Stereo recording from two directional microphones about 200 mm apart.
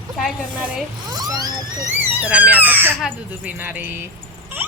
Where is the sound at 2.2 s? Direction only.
10° right (ahead or behind).